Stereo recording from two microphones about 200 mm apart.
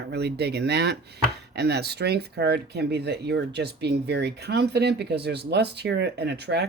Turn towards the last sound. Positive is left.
turn(degrees=-55)  # may be behind; listen again after turning